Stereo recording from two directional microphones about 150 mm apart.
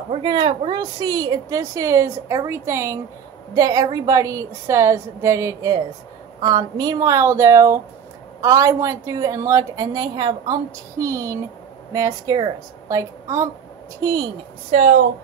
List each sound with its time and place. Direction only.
0.1 s a woman's voice: 30° right (ahead or behind)
14.7 s speech: 50° right (ahead or behind)